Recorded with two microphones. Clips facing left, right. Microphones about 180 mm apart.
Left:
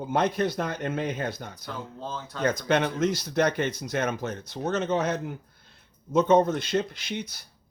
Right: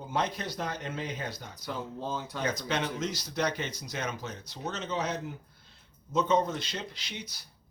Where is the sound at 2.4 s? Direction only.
55° left (ahead or behind).